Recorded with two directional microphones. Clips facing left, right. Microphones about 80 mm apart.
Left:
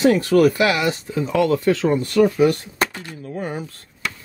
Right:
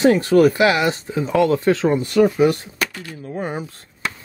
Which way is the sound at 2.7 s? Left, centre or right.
Left.